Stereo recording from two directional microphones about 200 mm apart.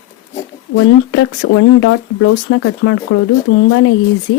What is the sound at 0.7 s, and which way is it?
Speech, 75° left (ahead or behind).